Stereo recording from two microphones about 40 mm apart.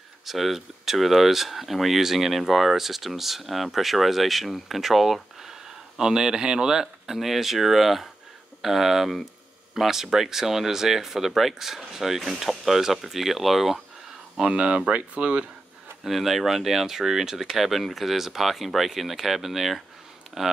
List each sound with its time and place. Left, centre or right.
0.2 s speech: centre
14.3 s speech: right
16.0 s speech: centre